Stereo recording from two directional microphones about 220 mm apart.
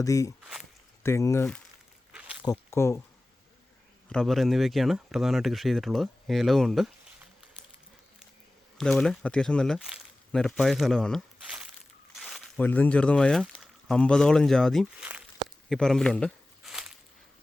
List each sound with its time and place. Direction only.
0.0 s speech: 15° left (ahead or behind)
2.1 s walk: 5° right (ahead or behind)
2.4 s speech: 15° left (ahead or behind)
4.1 s speech: centre (ahead or behind)
8.8 s speech: 5° left (ahead or behind)
15.7 s a sound: centre (ahead or behind)